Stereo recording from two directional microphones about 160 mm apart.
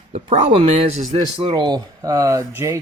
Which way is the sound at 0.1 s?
40° right (ahead or behind).